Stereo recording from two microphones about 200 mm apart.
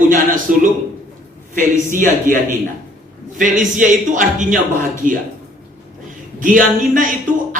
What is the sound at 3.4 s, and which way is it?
Speech, 40° right (ahead or behind).